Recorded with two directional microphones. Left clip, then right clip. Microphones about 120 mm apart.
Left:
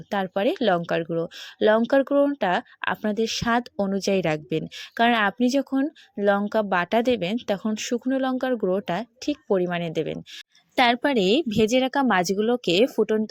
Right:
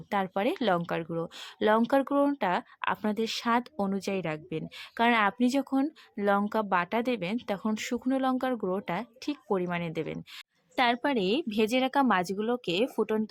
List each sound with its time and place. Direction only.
0.1 s speech: 25° left (ahead or behind)
4.1 s speech: 45° left (ahead or behind); by 7.7 s 30° left (ahead or behind)
7.7 s speech: 20° left (ahead or behind); by 12.9 s 35° left (ahead or behind)
13.0 s speech: 25° left (ahead or behind)